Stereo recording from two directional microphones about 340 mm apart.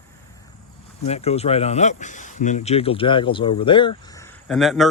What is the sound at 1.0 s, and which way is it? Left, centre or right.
Speech, centre.